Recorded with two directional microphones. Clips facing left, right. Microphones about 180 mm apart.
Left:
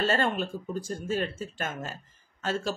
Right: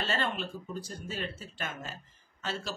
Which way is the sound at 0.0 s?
45° left (ahead or behind).